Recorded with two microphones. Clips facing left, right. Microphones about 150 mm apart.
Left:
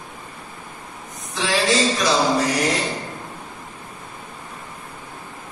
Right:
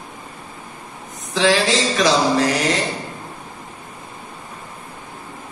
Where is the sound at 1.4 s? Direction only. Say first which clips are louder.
Right 2 dB; 90° right.